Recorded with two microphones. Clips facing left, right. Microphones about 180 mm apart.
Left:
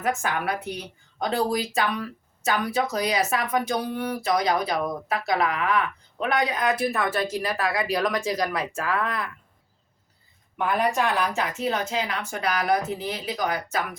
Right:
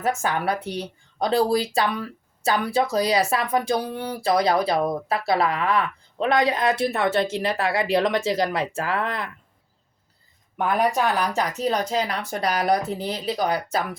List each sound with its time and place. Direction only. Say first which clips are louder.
0.0 s speech: right 2 dB; 30° right (ahead or behind)
10.8 s speech: right 2 dB; 40° right (ahead or behind)